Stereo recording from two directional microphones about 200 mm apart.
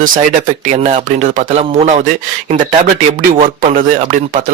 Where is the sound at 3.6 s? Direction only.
40° right (ahead or behind).